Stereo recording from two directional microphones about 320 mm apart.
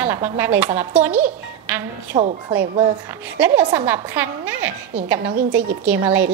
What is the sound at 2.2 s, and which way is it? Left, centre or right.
Speech, right.